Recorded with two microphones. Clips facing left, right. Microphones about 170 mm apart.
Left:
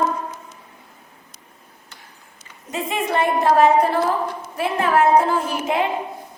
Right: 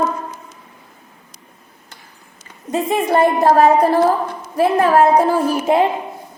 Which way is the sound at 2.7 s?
40° right (ahead or behind).